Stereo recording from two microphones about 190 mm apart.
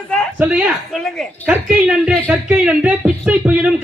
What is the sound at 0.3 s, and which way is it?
Speech, 5° right (ahead or behind).